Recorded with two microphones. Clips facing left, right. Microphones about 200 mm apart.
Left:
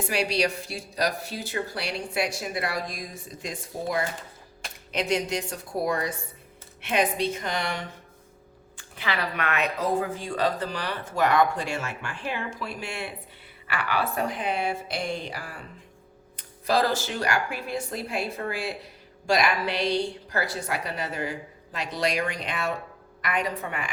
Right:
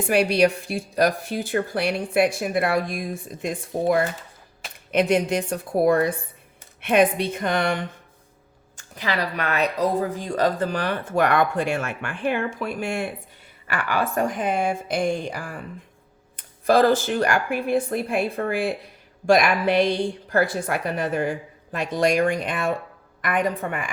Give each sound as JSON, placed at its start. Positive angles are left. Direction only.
{"t": 0.1, "sound": "speech", "side_deg": -55}
{"t": 8.7, "sound": "speech", "side_deg": -40}